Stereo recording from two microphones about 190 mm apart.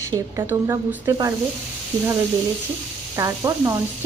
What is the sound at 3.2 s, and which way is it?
Speech, 15° right (ahead or behind).